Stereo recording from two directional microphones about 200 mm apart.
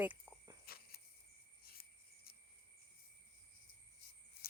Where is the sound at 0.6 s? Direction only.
50° left (ahead or behind).